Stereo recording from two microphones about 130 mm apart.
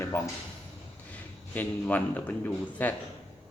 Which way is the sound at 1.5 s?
10° left (ahead or behind).